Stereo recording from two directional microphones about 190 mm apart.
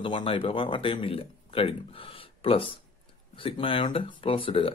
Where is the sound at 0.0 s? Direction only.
25° left (ahead or behind).